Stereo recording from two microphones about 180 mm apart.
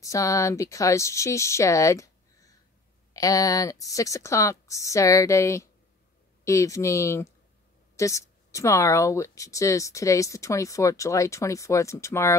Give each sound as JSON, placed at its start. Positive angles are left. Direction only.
{"t": 0.0, "sound": "a woman's voice", "side_deg": 20}